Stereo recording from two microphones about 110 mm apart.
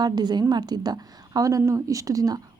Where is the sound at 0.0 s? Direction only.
40° right (ahead or behind).